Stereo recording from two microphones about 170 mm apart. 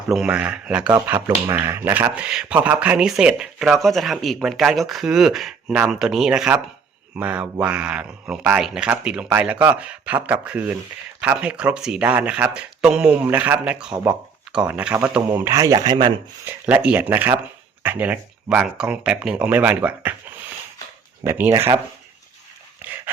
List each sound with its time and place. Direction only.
0.1 s speech: 5° right (ahead or behind); by 16.1 s 25° right (ahead or behind)
16.5 s speech: 10° right (ahead or behind)
21.2 s speech: 15° right (ahead or behind)